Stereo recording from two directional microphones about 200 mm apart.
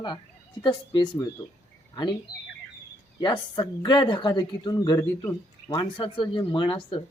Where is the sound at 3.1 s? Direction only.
20° left (ahead or behind).